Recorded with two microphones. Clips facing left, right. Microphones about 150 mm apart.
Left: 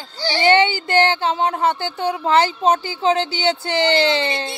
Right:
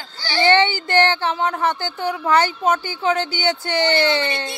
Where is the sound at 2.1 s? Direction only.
25° left (ahead or behind).